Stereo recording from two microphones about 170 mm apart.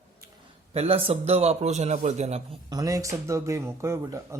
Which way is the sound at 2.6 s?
20° right (ahead or behind).